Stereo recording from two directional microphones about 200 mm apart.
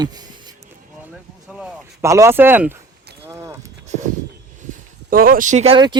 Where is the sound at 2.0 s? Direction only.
15° right (ahead or behind).